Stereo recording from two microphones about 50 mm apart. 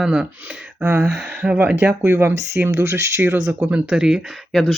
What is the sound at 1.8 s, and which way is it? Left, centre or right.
Speech, right.